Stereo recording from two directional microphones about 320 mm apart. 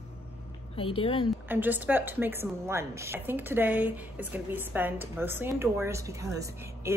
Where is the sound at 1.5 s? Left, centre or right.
Centre.